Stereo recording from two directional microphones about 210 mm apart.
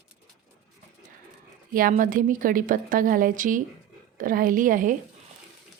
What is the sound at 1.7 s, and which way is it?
A woman's voice, 40° right (ahead or behind).